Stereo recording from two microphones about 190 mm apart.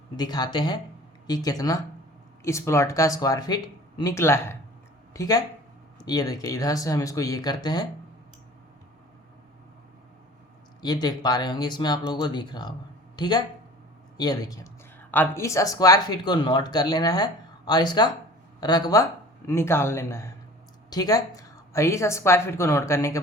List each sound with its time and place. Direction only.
0.2 s a woman's voice: 20° left (ahead or behind)
10.8 s a woman's voice: 20° left (ahead or behind)